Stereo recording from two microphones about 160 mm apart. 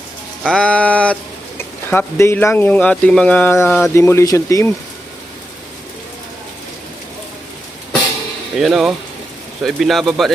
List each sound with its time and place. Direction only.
0.4 s speech: 5° left (ahead or behind)
8.5 s speech: centre (ahead or behind)